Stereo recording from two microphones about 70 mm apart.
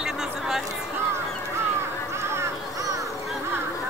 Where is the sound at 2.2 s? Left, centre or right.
Right.